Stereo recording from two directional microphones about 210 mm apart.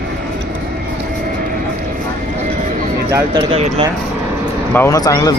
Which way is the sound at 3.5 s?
30° right (ahead or behind).